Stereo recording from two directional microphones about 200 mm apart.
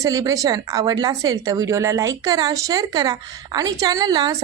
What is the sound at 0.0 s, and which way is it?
A woman's voice, 15° right (ahead or behind).